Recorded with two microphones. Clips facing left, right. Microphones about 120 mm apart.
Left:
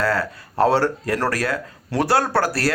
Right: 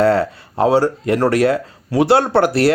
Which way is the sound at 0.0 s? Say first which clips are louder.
Right 8 dB; 25° right (ahead or behind).